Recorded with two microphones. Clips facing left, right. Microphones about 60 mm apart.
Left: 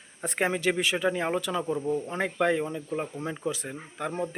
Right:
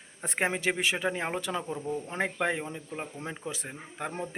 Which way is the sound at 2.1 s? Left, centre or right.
Right.